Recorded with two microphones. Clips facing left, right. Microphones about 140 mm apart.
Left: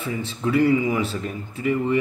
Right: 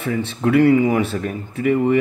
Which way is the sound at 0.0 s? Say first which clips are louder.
Right 5 dB; 65° right (ahead or behind).